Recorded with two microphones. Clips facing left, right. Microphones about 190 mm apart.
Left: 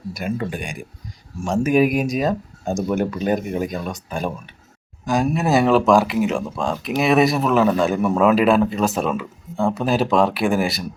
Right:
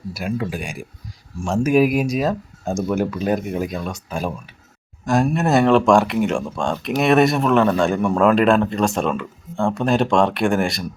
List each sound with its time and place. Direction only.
0.1 s speech: centre (ahead or behind)